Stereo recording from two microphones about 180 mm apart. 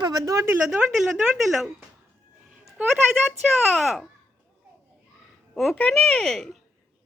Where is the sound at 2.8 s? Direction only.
5° right (ahead or behind).